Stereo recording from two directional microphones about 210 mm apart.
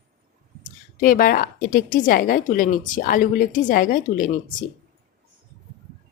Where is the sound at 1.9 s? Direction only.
40° left (ahead or behind).